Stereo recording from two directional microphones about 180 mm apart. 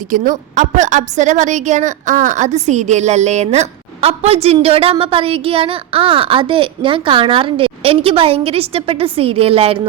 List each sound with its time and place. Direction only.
0.1 s a woman's voice: 45° right (ahead or behind)